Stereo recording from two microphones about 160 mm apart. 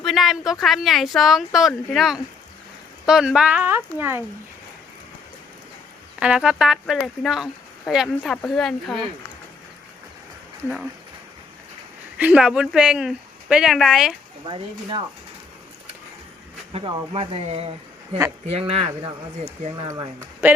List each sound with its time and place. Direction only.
0.0 s speech: centre (ahead or behind)
6.1 s speech: 5° right (ahead or behind)
12.1 s speech: 5° right (ahead or behind)
14.4 s speech: 30° right (ahead or behind)
17.1 s speech: 35° right (ahead or behind); by 20.6 s 15° right (ahead or behind)